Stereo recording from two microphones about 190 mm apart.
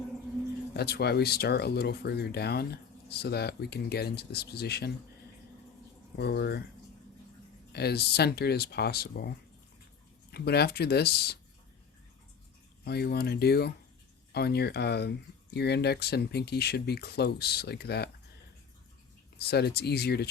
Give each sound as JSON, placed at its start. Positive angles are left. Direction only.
{"t": 0.7, "sound": "speech", "side_deg": 55}
{"t": 6.1, "sound": "speech", "side_deg": 60}
{"t": 7.7, "sound": "speech", "side_deg": 60}
{"t": 10.3, "sound": "speech", "side_deg": 60}
{"t": 12.8, "sound": "speech", "side_deg": 55}
{"t": 19.4, "sound": "speech", "side_deg": 55}